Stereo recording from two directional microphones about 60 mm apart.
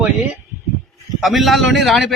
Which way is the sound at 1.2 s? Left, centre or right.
Centre.